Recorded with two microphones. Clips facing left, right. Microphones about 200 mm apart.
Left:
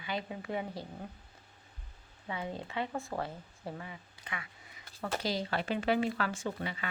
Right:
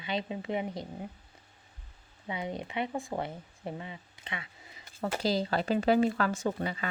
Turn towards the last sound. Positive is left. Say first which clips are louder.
# right 5 dB
turn(degrees=-40)  # may be behind; listen again after turning